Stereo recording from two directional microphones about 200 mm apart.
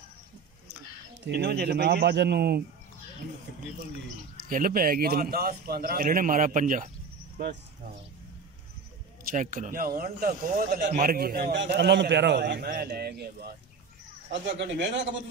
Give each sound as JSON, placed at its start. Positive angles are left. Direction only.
{"t": 1.2, "sound": "a man's voice", "side_deg": -55}
{"t": 4.4, "sound": "a man's voice", "side_deg": -45}
{"t": 9.2, "sound": "a man's voice", "side_deg": -40}
{"t": 14.4, "sound": "speech", "side_deg": -65}